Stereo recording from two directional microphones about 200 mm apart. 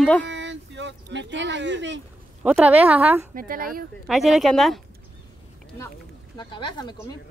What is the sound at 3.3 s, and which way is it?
Speech, 45° right (ahead or behind).